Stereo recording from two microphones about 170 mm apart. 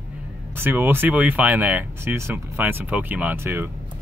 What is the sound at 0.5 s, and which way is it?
Speech, 10° right (ahead or behind).